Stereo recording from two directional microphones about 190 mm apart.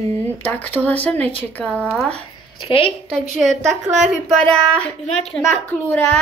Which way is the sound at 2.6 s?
30° left (ahead or behind).